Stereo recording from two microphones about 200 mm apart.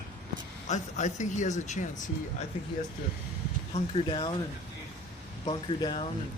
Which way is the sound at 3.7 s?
25° left (ahead or behind).